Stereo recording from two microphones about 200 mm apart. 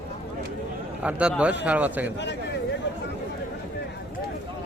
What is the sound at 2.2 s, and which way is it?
Speech, 60° left (ahead or behind).